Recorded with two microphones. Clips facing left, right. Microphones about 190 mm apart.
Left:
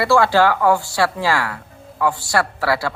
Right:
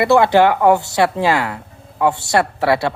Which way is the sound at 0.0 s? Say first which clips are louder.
Right 3 dB; 20° right (ahead or behind).